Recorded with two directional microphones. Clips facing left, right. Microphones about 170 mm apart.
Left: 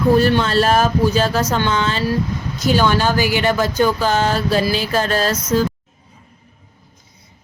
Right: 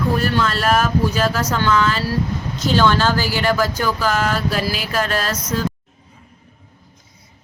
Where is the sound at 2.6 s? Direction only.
10° left (ahead or behind); by 5.3 s 30° left (ahead or behind).